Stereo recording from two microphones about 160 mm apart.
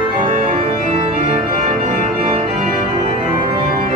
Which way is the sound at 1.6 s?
55° right (ahead or behind).